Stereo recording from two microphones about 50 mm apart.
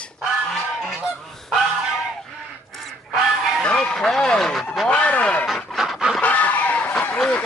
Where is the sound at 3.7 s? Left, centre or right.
Left.